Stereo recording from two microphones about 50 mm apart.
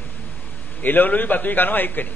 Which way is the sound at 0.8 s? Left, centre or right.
Left.